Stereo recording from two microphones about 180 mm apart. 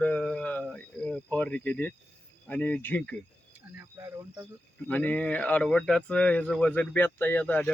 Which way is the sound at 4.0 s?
15° right (ahead or behind).